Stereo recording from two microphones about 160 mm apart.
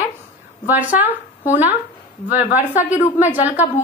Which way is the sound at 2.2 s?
10° right (ahead or behind).